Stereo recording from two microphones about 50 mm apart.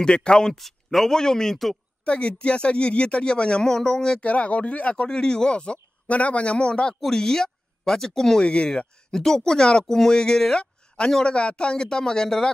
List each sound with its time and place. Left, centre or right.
0.0 s speech: centre
0.6 s speech: centre
2.0 s speech: left
4.2 s speech: left